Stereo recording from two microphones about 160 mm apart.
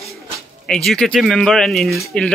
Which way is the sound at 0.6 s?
5° left (ahead or behind).